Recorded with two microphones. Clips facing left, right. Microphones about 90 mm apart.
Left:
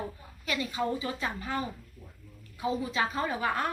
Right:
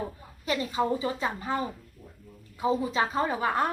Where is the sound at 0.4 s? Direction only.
30° right (ahead or behind).